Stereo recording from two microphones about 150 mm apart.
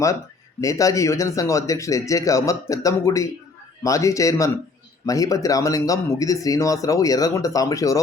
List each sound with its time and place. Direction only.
0.6 s speech: 20° left (ahead or behind)